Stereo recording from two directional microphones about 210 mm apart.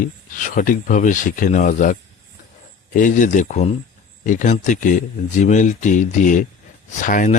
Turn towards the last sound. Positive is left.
turn(degrees=40)  # may be behind; listen again after turning